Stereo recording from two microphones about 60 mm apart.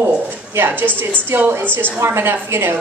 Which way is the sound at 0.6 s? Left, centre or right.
Right.